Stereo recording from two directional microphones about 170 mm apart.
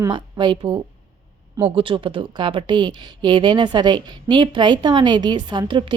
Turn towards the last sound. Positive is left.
turn(degrees=-30)  # may be behind; listen again after turning